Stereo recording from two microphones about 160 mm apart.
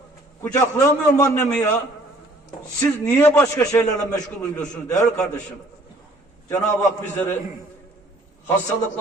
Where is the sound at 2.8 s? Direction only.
15° left (ahead or behind).